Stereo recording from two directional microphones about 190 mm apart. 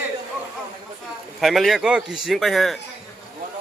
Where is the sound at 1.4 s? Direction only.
Centre (ahead or behind).